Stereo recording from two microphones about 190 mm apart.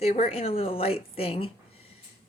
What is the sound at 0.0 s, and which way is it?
A woman's voice, 30° left (ahead or behind).